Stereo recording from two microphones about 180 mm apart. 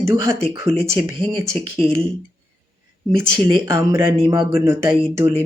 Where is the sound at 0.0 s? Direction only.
15° right (ahead or behind).